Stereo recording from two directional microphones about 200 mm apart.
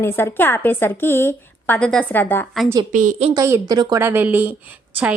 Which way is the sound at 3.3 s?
15° right (ahead or behind).